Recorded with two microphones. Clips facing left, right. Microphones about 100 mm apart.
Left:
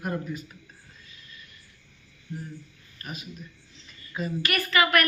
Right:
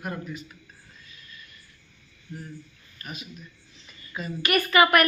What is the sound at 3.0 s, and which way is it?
Speech, 40° left (ahead or behind).